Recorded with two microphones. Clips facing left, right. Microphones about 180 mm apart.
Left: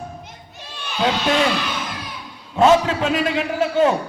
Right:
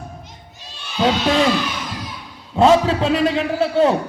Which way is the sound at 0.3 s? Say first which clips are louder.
Left 2 dB; 55° left (ahead or behind).